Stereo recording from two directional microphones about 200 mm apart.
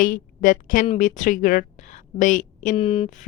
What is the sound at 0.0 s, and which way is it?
A woman's voice, 40° left (ahead or behind).